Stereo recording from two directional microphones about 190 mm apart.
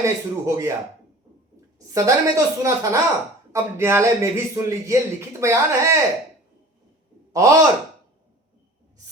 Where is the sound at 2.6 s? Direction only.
15° right (ahead or behind).